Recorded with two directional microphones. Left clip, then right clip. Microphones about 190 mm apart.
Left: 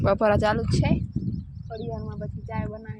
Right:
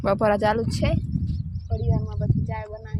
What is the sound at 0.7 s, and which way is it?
Speech, 40° right (ahead or behind).